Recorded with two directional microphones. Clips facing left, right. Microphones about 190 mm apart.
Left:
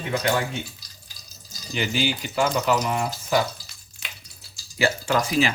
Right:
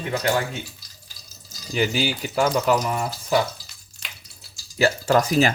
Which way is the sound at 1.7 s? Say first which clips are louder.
Right 2 dB; 40° right (ahead or behind).